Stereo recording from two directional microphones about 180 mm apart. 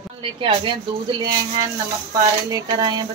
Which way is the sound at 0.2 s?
30° right (ahead or behind).